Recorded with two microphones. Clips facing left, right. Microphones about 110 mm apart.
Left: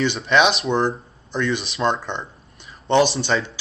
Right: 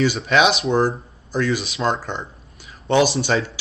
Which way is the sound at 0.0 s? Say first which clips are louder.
Right 1 dB; 5° right (ahead or behind).